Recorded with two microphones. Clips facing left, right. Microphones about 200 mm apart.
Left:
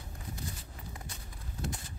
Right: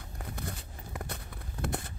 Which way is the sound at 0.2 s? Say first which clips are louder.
Right 4 dB; 60° right (ahead or behind).